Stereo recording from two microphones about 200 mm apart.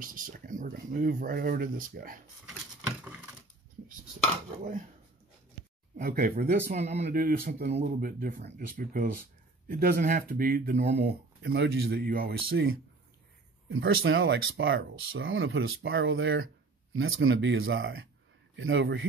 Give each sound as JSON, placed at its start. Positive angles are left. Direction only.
{"t": 0.0, "sound": "speech", "side_deg": -45}
{"t": 2.4, "sound": "a sound", "side_deg": -5}
{"t": 5.9, "sound": "speech", "side_deg": -45}
{"t": 6.8, "sound": "speech", "side_deg": -35}
{"t": 11.0, "sound": "speech", "side_deg": -55}
{"t": 12.5, "sound": "speech", "side_deg": -80}
{"t": 16.9, "sound": "speech", "side_deg": -85}